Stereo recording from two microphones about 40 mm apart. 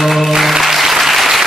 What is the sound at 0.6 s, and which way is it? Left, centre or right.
Applause, centre.